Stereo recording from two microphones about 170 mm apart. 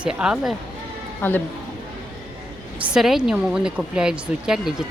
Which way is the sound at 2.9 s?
5° right (ahead or behind).